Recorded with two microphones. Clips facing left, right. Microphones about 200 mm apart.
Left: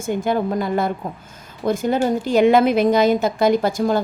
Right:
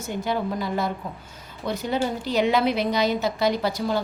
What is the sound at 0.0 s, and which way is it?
Speech, 50° left (ahead or behind).